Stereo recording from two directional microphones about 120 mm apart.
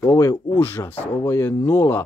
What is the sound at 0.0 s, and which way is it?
Speech, 25° left (ahead or behind).